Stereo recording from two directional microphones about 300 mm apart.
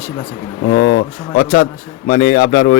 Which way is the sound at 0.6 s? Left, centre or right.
Left.